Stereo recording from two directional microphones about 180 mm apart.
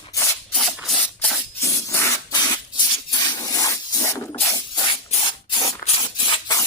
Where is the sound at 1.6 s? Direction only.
15° left (ahead or behind).